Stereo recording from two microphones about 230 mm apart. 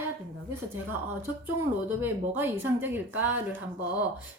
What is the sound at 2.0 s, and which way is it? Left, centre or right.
A woman's voice, centre.